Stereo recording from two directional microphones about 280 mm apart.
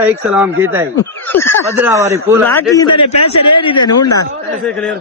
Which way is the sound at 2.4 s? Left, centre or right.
Centre.